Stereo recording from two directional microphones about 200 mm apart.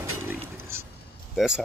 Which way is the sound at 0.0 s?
10° right (ahead or behind).